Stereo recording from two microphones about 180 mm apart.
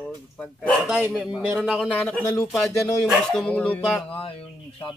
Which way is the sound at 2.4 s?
Centre (ahead or behind).